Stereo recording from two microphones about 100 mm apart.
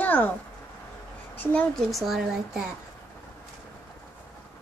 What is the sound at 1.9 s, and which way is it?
Speech, centre (ahead or behind).